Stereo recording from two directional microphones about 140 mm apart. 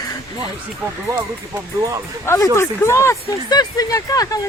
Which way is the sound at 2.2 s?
20° left (ahead or behind).